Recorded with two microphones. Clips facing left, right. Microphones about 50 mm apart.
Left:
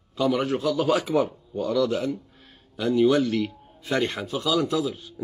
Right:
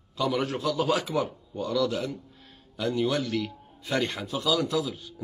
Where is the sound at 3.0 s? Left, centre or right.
Left.